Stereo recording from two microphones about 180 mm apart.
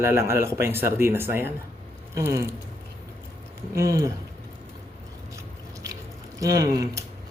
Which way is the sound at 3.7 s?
20° right (ahead or behind).